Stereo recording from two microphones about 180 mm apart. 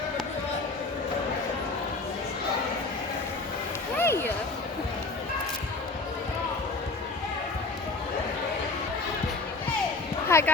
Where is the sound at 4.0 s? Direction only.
10° left (ahead or behind).